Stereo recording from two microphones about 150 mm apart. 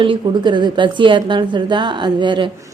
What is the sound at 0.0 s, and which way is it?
A woman's voice, 35° right (ahead or behind).